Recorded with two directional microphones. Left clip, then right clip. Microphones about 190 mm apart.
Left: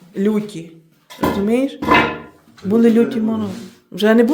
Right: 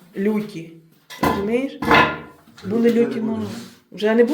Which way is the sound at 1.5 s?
35° left (ahead or behind).